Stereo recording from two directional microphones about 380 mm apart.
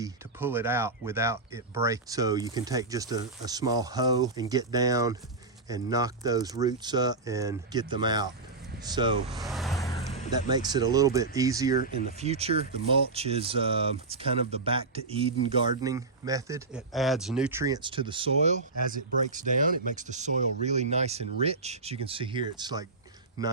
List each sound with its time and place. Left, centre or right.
0.0 s speech: centre
9.3 s vehicle: centre
10.5 s speech: centre
11.8 s speech: left
12.2 s speech: centre